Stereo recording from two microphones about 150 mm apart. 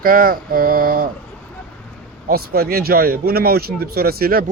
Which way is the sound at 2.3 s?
90° right.